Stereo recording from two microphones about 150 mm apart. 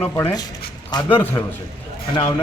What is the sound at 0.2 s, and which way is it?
Speech, 20° left (ahead or behind).